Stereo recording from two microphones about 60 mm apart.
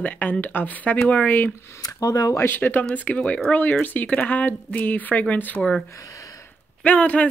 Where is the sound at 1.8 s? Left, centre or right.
Left.